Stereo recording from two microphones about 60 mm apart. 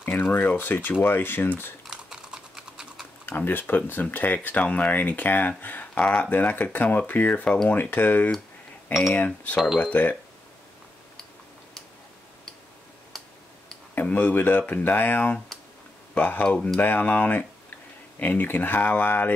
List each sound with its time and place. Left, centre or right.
0.0 s speech: left
1.9 s typing: centre
3.3 s speech: left
13.1 s tick-tock: centre
13.9 s speech: left
16.4 s speech: centre
16.8 s speech: left